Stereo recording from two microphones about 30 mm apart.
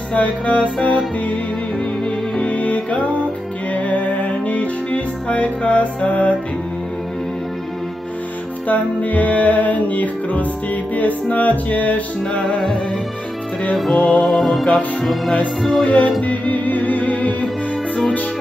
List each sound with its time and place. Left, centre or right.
0.1 s music: left
2.5 s music: left
8.6 s music: left
12.3 s music: left
13.7 s music: centre
15.8 s music: left